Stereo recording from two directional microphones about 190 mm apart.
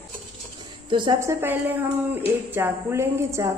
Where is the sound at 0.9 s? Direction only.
25° right (ahead or behind).